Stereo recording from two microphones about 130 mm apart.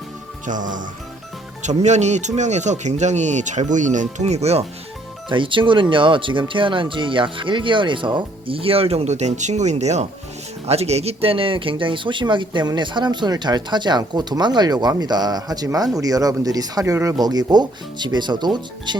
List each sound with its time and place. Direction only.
0.4 s speech: 80° right
1.6 s speech: 60° right (ahead or behind)
5.3 s speech: 40° right (ahead or behind)